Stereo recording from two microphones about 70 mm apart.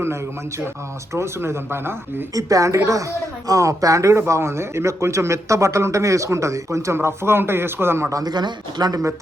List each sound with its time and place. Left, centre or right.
1.1 s speech: right
2.3 s speech: right
8.1 s speech: right